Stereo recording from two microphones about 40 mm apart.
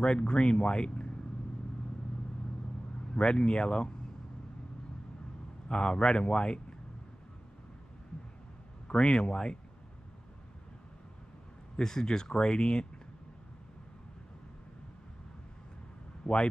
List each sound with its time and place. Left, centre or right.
0.0 s speech: left
3.2 s speech: left
5.7 s speech: left
8.8 s speech: left
11.8 s speech: centre
16.3 s speech: left